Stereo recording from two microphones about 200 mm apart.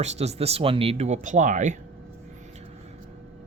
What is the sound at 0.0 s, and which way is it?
Speech, 30° right (ahead or behind).